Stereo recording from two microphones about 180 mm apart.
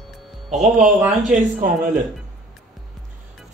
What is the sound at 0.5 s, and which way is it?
Speech, 40° right (ahead or behind).